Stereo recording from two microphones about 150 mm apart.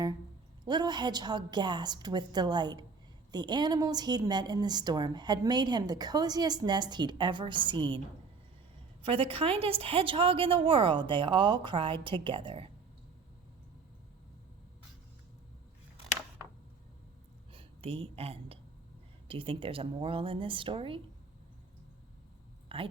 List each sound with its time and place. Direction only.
0.6 s a woman's voice: 30° right (ahead or behind)
9.0 s a woman's voice: 35° right (ahead or behind)
17.5 s a sound: 40° right (ahead or behind)
19.3 s a woman's voice: 35° right (ahead or behind)
22.7 s speech: 40° right (ahead or behind)